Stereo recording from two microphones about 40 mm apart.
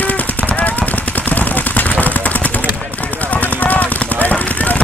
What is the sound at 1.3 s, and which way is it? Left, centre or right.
Gunshot, left.